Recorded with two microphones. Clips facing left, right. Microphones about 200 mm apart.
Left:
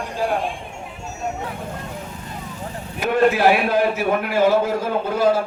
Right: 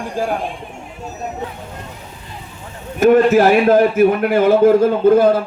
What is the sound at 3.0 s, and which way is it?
A man's voice, 45° right (ahead or behind).